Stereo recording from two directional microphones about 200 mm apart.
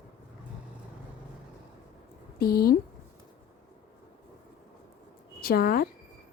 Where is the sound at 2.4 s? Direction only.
50° left (ahead or behind).